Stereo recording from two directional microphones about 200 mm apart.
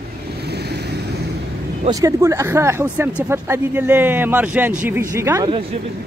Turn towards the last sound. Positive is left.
turn(degrees=-15)  # may be behind; listen again after turning